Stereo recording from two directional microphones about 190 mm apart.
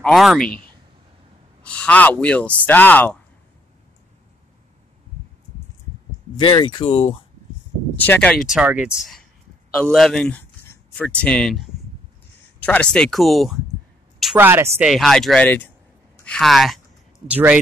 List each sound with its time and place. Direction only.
0.0 s speech: centre (ahead or behind)
1.6 s speech: 5° left (ahead or behind)
6.3 s speech: 25° left (ahead or behind)
8.0 s a woman's voice: 5° left (ahead or behind); by 14.9 s 15° right (ahead or behind)
14.9 s a woman's voice: centre (ahead or behind)